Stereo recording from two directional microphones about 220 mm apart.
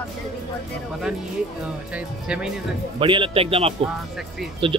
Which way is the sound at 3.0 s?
25° right (ahead or behind).